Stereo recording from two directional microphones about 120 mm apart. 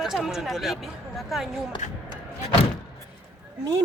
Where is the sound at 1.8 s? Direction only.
85° left.